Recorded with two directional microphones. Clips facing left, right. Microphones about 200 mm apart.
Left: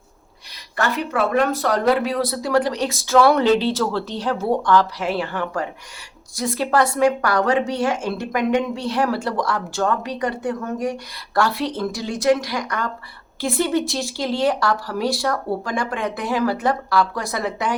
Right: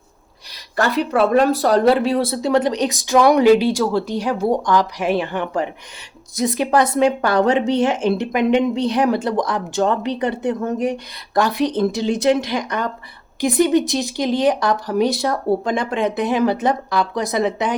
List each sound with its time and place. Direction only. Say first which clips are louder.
0.8 s a woman's voice: right 4 dB; 35° right (ahead or behind)